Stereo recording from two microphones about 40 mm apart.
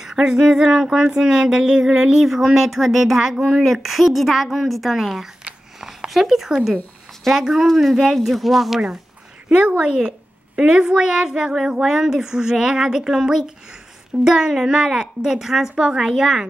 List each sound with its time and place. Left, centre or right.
0.0 s a sound: centre
3.6 s a woman's voice: centre
7.3 s a woman's voice: centre
7.7 s a woman's voice: centre
9.5 s a woman's voice: right
11.5 s a sound: centre